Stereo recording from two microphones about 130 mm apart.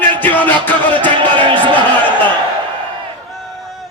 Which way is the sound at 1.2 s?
35° right (ahead or behind).